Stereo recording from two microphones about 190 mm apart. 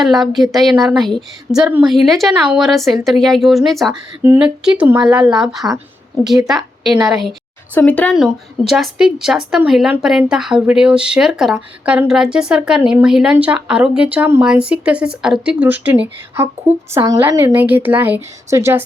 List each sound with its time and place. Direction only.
0.0 s speech: centre (ahead or behind)
4.2 s speech: 15° right (ahead or behind)
7.0 s a sound: centre (ahead or behind)
7.8 s speech: 10° left (ahead or behind); by 18.8 s 10° right (ahead or behind)